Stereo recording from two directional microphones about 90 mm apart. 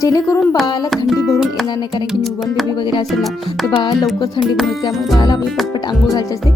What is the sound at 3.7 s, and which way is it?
Music, 60° left (ahead or behind).